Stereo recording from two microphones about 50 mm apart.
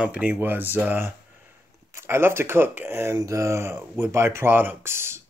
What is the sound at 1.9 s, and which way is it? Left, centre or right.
Speech, right.